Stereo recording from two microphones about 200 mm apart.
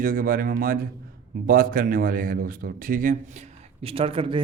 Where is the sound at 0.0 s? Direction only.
45° right (ahead or behind).